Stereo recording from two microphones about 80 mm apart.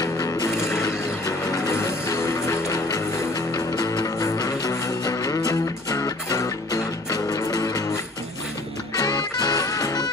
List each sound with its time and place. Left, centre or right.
0.0 s music: left
1.7 s music: left
3.5 s music: left
8.9 s music: left